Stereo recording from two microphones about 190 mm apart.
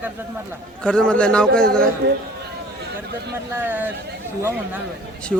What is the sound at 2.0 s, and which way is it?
Speech, 60° right (ahead or behind).